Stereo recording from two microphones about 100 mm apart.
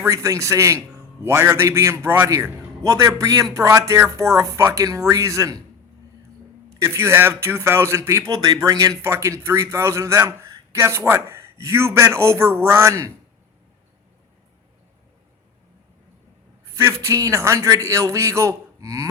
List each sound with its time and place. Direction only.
0.0 s a man's voice: 30° right (ahead or behind)
6.7 s a man's voice: 30° right (ahead or behind)
16.7 s speech: 30° right (ahead or behind)